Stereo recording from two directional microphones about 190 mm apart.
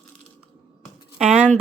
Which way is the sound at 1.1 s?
5° right (ahead or behind).